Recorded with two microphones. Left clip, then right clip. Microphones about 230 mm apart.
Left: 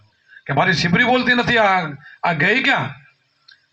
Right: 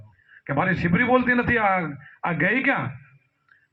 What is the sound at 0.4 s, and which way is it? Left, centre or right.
Speech, left.